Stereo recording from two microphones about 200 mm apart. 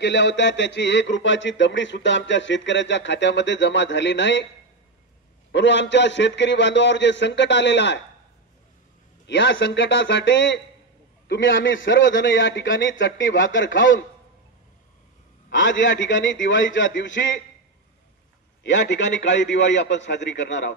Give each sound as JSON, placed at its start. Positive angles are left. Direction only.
{"t": 0.0, "sound": "speech", "side_deg": 60}
{"t": 5.5, "sound": "speech", "side_deg": 60}
{"t": 9.3, "sound": "a man's voice", "side_deg": 60}
{"t": 15.5, "sound": "speech", "side_deg": 65}
{"t": 18.6, "sound": "speech", "side_deg": 60}